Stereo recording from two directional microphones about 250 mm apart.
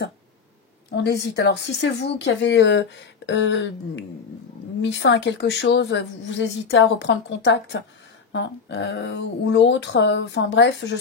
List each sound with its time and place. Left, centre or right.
0.9 s speech: left